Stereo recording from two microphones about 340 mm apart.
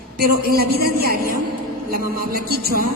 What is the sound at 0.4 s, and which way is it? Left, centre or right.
Music, right.